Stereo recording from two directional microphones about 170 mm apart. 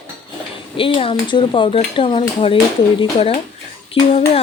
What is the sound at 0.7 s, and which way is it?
A woman's voice, 30° left (ahead or behind).